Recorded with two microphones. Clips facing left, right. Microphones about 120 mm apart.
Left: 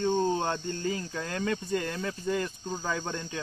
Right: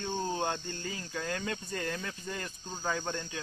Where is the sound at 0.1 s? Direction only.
20° left (ahead or behind).